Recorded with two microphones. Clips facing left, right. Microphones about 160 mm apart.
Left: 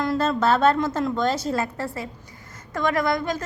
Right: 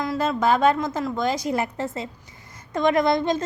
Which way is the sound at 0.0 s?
5° right (ahead or behind).